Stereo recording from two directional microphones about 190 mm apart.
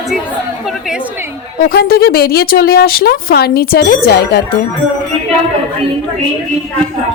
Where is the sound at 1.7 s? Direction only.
55° left (ahead or behind).